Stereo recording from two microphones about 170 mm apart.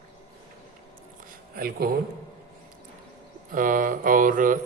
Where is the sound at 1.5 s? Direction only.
60° right (ahead or behind).